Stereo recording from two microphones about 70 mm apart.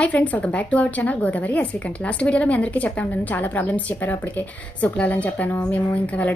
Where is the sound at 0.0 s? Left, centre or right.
Centre.